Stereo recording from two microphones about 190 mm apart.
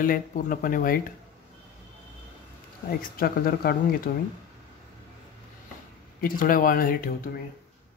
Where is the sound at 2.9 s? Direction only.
50° left (ahead or behind).